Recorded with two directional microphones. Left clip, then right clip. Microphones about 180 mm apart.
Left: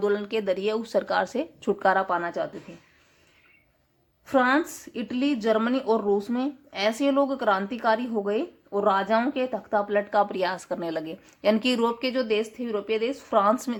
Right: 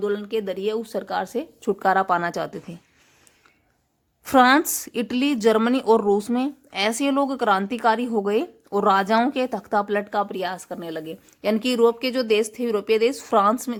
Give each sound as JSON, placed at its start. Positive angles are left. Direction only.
{"t": 0.0, "sound": "a woman's voice", "side_deg": -20}
{"t": 4.3, "sound": "a woman's voice", "side_deg": -35}